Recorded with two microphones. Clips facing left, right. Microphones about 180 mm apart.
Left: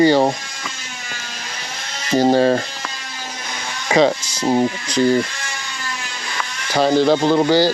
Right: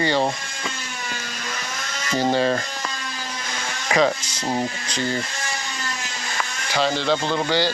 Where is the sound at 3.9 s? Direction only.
30° left (ahead or behind).